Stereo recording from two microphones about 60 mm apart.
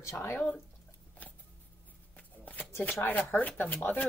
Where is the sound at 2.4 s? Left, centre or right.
Left.